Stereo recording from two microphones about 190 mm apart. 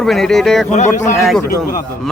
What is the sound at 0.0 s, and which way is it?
Speech, centre (ahead or behind).